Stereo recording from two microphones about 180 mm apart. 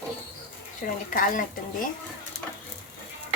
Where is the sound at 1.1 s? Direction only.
50° left (ahead or behind).